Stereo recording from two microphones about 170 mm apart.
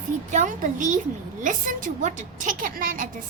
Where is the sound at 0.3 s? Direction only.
45° right (ahead or behind).